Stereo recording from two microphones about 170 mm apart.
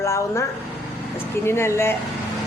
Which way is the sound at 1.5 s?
15° left (ahead or behind).